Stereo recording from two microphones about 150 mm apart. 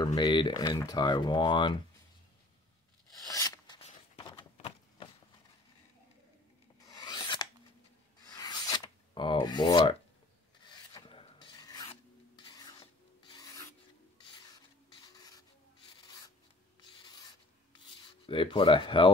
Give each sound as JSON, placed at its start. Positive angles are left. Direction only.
{"t": 0.0, "sound": "speech", "side_deg": 30}
{"t": 3.3, "sound": "rub", "side_deg": 25}
{"t": 4.2, "sound": "a sound", "side_deg": 30}
{"t": 6.8, "sound": "filing", "side_deg": 25}
{"t": 8.2, "sound": "rub", "side_deg": 25}
{"t": 10.6, "sound": "filing", "side_deg": 30}
{"t": 14.5, "sound": "printer", "side_deg": 25}
{"t": 16.0, "sound": "rub", "side_deg": 25}
{"t": 17.7, "sound": "a sound", "side_deg": 35}